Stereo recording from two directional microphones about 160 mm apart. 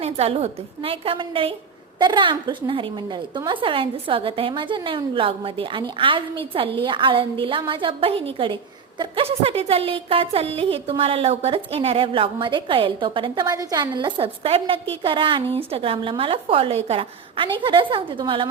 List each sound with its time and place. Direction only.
0.0 s a woman's voice: 40° right (ahead or behind)